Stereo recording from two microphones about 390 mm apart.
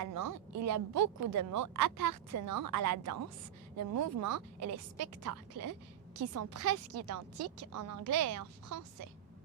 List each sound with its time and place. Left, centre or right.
0.0 s a woman's voice: right